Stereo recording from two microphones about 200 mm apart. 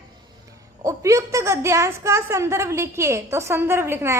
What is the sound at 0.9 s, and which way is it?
A woman's voice, 15° right (ahead or behind).